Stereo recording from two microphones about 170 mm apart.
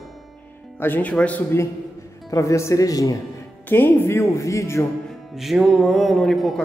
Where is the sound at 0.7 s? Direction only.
10° left (ahead or behind).